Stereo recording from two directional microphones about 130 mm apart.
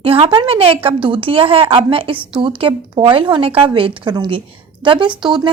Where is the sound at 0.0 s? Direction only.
45° right (ahead or behind).